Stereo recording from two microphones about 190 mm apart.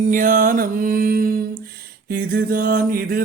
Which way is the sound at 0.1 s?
45° right (ahead or behind).